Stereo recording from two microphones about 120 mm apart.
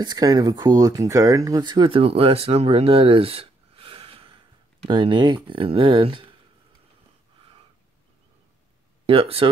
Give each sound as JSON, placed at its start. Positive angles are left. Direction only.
{"t": 0.0, "sound": "speech", "side_deg": -35}
{"t": 9.0, "sound": "speech", "side_deg": -50}